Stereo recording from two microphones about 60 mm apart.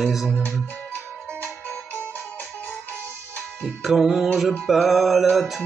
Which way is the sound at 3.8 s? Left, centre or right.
Centre.